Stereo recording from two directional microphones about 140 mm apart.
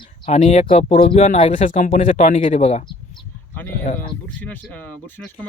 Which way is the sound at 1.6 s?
65° left (ahead or behind).